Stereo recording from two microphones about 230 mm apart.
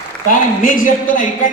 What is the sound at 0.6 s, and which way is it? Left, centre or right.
Speech, left.